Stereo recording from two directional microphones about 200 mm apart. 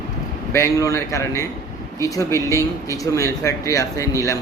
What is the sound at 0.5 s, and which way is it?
Speech, 15° left (ahead or behind).